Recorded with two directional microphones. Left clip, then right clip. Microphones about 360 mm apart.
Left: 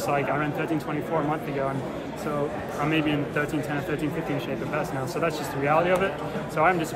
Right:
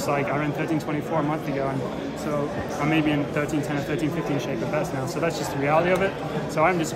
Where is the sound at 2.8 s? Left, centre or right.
Centre.